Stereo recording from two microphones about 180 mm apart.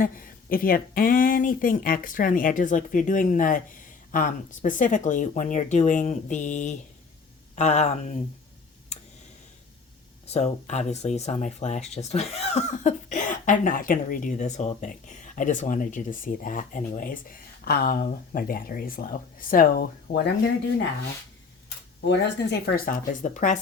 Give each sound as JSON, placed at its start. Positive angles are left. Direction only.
{"t": 0.0, "sound": "speech", "side_deg": 50}
{"t": 10.2, "sound": "speech", "side_deg": 35}
{"t": 22.0, "sound": "speech", "side_deg": 75}